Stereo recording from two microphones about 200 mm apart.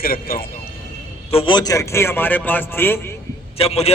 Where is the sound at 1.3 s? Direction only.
25° left (ahead or behind).